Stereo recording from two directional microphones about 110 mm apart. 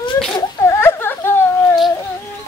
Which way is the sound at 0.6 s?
25° left (ahead or behind).